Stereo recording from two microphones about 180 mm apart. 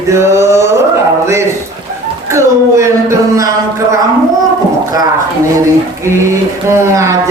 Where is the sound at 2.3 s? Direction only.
15° right (ahead or behind).